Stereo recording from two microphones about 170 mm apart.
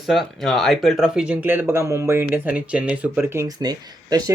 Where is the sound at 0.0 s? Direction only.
Centre (ahead or behind).